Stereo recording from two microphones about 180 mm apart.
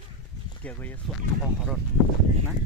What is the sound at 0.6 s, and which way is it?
Speech, 10° left (ahead or behind).